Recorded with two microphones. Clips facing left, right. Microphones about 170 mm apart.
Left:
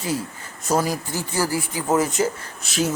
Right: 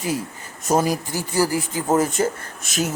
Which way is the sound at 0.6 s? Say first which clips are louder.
Right 2 dB; 20° right (ahead or behind).